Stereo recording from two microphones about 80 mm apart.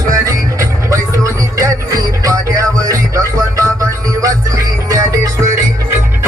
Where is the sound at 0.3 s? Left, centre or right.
Right.